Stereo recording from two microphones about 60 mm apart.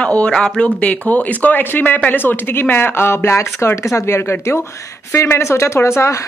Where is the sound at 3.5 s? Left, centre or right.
Left.